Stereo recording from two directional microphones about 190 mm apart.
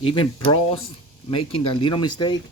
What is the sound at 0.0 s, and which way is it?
Speech, 25° left (ahead or behind).